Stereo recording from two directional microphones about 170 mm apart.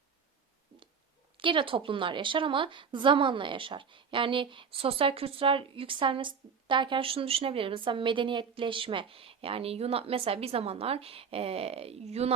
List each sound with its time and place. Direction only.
1.4 s a woman's voice: 30° right (ahead or behind)